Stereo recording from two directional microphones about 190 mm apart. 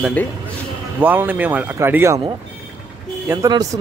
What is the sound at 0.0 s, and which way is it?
Speech, 10° left (ahead or behind).